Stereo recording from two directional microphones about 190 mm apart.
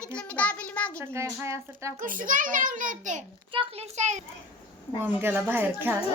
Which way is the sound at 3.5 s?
30° right (ahead or behind).